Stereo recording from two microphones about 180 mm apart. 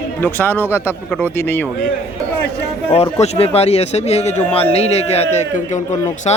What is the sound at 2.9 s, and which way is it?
A man's voice, 35° left (ahead or behind).